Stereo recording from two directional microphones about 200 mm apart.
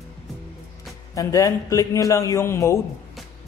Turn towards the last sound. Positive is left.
turn(degrees=15)  # may be behind; listen again after turning